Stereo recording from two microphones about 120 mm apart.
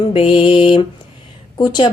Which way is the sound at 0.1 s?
50° left (ahead or behind).